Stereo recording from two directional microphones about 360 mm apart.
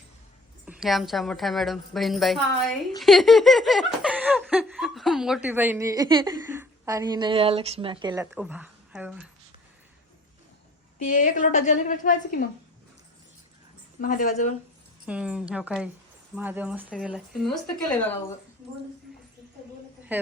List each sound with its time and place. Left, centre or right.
0.6 s laughter: centre
11.0 s a woman's voice: left
14.0 s a woman's voice: left
15.0 s laughter: centre
17.8 s speech: centre